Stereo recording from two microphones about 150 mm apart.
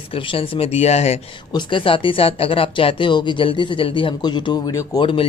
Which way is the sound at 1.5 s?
35° left (ahead or behind).